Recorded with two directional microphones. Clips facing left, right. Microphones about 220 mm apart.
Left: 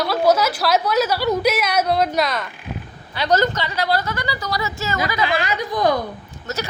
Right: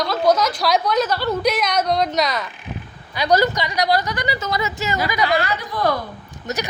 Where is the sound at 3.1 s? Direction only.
10° right (ahead or behind).